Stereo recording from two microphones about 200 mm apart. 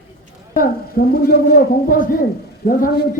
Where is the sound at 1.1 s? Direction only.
50° left (ahead or behind).